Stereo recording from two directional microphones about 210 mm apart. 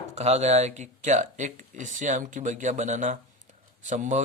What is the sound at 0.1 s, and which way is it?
Speech, 30° right (ahead or behind).